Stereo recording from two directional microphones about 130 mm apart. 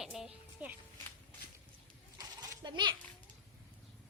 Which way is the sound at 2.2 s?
35° right (ahead or behind).